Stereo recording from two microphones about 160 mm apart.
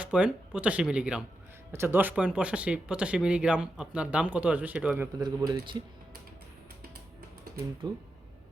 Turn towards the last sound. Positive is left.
turn(degrees=-25)  # may be behind; listen again after turning